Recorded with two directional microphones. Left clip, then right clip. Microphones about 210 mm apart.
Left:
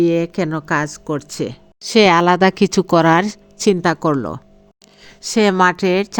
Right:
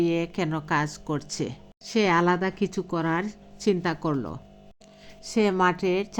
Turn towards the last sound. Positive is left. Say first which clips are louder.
# left 8 dB
turn(degrees=50)  # may be behind; listen again after turning